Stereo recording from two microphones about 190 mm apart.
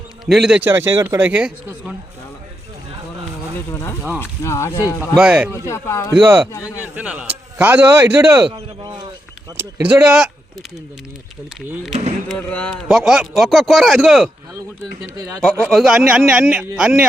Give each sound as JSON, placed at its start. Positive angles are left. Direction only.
{"t": 0.3, "sound": "speech", "side_deg": 0}
{"t": 3.7, "sound": "speech", "side_deg": 15}
{"t": 4.9, "sound": "a man's voice", "side_deg": -5}
{"t": 5.6, "sound": "speech", "side_deg": 15}
{"t": 6.1, "sound": "speech", "side_deg": -10}
{"t": 6.5, "sound": "speech", "side_deg": 15}
{"t": 6.9, "sound": "speech", "side_deg": -5}
{"t": 8.4, "sound": "a sound", "side_deg": -20}
{"t": 9.6, "sound": "speech", "side_deg": -10}
{"t": 11.9, "sound": "speech", "side_deg": -35}
{"t": 12.3, "sound": "a man's voice", "side_deg": 5}
{"t": 15.7, "sound": "a man's voice", "side_deg": 0}